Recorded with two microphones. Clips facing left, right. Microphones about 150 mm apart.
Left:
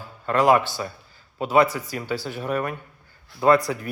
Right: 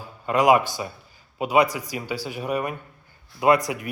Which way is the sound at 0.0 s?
10° right (ahead or behind).